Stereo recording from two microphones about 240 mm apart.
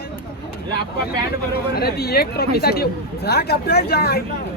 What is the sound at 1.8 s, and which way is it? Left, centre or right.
Speech, left.